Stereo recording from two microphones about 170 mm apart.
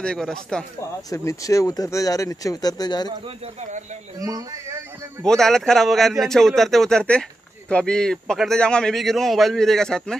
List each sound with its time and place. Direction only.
0.0 s a man's voice: 5° left (ahead or behind)
1.1 s speech: 20° left (ahead or behind)
4.2 s a man's voice: 20° right (ahead or behind)
5.2 s a man's voice: 5° left (ahead or behind)